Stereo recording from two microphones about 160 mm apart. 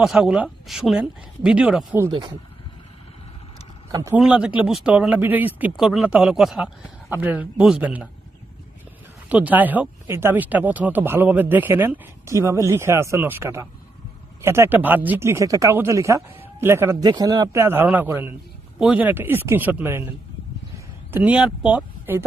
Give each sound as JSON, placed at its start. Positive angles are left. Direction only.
{"t": 0.0, "sound": "speech", "side_deg": -5}
{"t": 2.0, "sound": "speech", "side_deg": -30}
{"t": 3.9, "sound": "speech", "side_deg": -20}
{"t": 4.2, "sound": "speech", "side_deg": -5}
{"t": 9.3, "sound": "speech", "side_deg": -10}